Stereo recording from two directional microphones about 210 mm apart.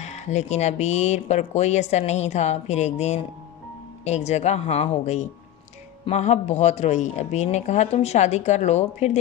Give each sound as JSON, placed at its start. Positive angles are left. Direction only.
{"t": 0.0, "sound": "speech", "side_deg": 35}